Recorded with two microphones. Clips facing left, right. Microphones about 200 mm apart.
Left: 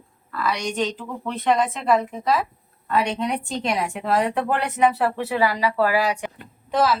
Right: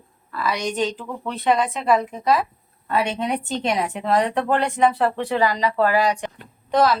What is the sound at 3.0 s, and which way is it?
Speech, 25° right (ahead or behind).